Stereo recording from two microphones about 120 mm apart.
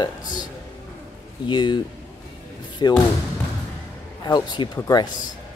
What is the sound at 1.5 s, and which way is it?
Speech, 40° left (ahead or behind).